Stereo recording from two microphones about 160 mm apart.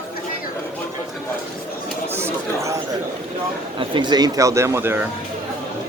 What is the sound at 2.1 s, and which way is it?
Speech, 15° right (ahead or behind).